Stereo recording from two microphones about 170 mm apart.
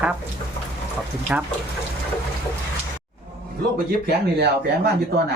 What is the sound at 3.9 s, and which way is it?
Speech, 70° right (ahead or behind).